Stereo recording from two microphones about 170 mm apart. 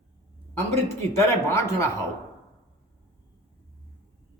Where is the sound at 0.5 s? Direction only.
15° left (ahead or behind).